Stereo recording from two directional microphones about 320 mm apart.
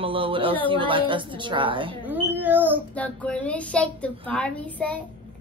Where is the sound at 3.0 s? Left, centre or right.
Centre.